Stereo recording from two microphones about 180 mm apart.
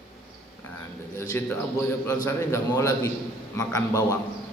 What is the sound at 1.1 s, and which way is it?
A man's voice, 15° left (ahead or behind).